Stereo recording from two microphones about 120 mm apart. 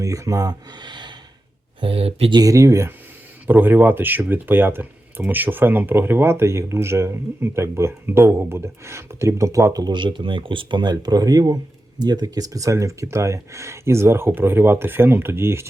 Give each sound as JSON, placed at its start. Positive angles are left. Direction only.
{"t": 0.0, "sound": "speech", "side_deg": -30}
{"t": 1.8, "sound": "speech", "side_deg": -55}
{"t": 2.3, "sound": "speech", "side_deg": -30}